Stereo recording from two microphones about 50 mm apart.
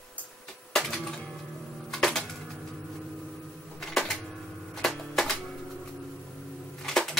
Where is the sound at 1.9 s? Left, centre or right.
Centre.